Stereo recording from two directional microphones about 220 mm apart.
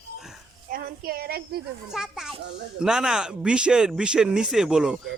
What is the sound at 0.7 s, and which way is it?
Speech, 40° right (ahead or behind).